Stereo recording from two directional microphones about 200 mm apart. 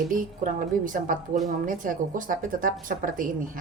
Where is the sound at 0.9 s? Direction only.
40° right (ahead or behind).